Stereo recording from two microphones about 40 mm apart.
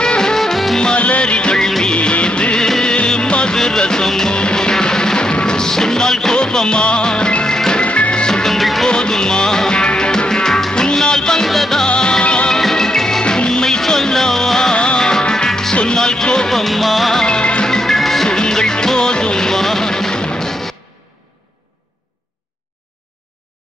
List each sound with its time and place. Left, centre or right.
0.0 s music: centre
0.9 s music: left
2.0 s music of bollywood: left
2.8 s music: left
3.5 s music: centre
7.8 s music: left
8.5 s music: centre
8.8 s music: centre
11.9 s music: left
12.5 s music: centre
16.4 s music: centre
17.2 s music: left
17.6 s music: centre